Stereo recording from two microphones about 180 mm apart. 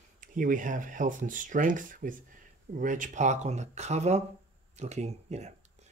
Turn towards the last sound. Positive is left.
turn(degrees=-40)  # may be behind; listen again after turning